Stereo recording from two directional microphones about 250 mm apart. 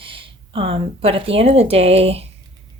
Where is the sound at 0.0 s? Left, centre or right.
Right.